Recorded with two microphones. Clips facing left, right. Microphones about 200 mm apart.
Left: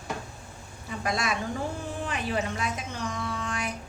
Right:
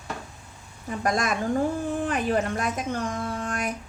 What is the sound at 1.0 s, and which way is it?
Speech, 45° right (ahead or behind).